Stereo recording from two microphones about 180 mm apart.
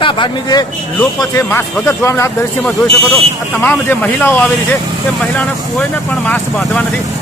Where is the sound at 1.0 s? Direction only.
15° left (ahead or behind).